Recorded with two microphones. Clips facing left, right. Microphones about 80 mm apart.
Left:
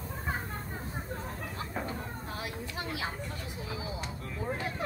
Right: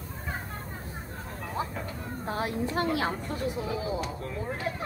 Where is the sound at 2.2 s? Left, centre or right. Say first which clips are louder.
Right 13 dB; right.